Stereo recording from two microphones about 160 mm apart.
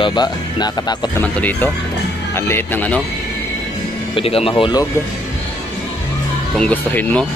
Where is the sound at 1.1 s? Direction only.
10° left (ahead or behind).